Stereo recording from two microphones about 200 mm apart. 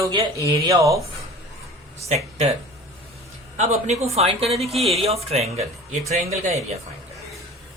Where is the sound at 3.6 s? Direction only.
35° right (ahead or behind).